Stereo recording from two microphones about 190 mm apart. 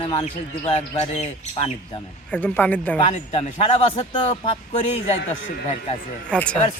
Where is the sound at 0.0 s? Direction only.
30° left (ahead or behind).